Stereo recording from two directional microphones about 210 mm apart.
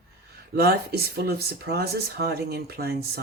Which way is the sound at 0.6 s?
50° right (ahead or behind).